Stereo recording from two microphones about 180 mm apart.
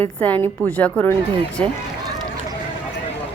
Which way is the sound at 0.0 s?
10° left (ahead or behind).